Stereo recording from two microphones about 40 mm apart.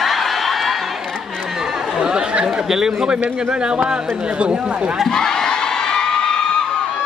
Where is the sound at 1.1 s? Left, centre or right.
Centre.